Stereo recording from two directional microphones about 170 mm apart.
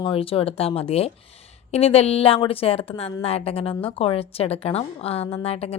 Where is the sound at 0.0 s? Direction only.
35° left (ahead or behind).